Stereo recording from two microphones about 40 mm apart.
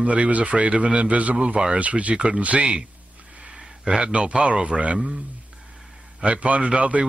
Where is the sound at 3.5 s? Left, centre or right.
Right.